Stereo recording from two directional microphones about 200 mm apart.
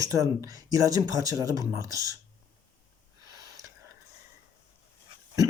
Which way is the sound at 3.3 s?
15° right (ahead or behind).